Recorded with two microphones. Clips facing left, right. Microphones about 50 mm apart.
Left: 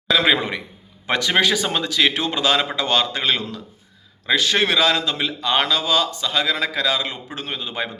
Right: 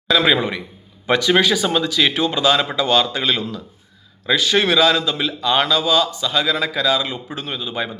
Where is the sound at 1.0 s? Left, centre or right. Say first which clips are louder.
Right 3 dB; left.